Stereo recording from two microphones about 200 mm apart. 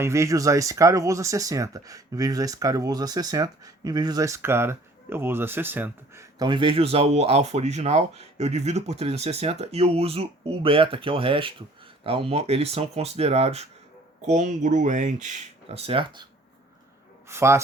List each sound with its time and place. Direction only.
0.0 s speech: 15° right (ahead or behind)
6.4 s speech: 25° right (ahead or behind)
17.2 s speech: 15° right (ahead or behind)